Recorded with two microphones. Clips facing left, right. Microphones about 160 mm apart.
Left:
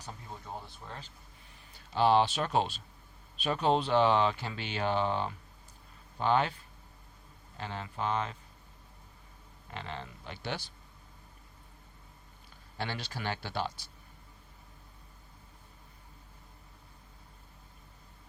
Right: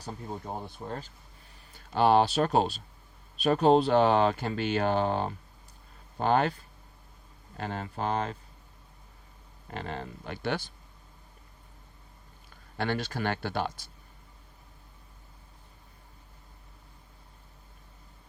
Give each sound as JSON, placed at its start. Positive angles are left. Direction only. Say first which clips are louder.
{"t": 0.0, "sound": "speech", "louder": "right 7 dB", "side_deg": -50}
{"t": 7.5, "sound": "speech", "louder": "right 5 dB", "side_deg": -45}
{"t": 9.6, "sound": "speech", "louder": "right 5 dB", "side_deg": -45}
{"t": 12.7, "sound": "speech", "louder": "right 7 dB", "side_deg": -55}